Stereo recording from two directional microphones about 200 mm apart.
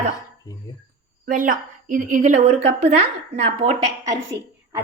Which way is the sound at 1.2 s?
40° right (ahead or behind).